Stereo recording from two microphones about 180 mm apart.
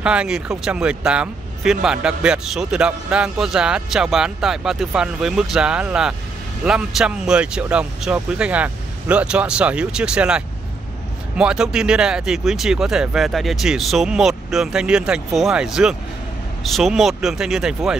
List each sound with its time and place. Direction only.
0.0 s speech: 5° right (ahead or behind)